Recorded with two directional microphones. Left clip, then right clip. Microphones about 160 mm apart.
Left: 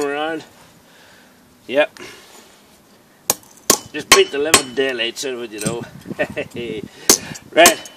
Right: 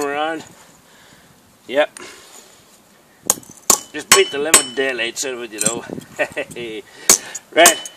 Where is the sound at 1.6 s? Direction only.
10° left (ahead or behind).